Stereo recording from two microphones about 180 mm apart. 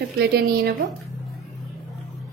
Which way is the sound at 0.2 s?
60° right (ahead or behind).